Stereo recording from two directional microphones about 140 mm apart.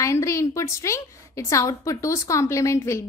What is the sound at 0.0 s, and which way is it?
A woman's voice, 20° left (ahead or behind).